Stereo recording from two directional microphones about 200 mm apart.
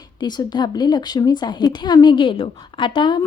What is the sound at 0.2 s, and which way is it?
A woman's voice, 20° left (ahead or behind).